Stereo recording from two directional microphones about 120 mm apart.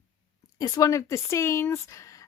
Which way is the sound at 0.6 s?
30° left (ahead or behind).